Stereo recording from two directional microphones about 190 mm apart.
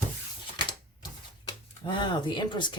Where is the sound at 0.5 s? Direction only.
25° left (ahead or behind).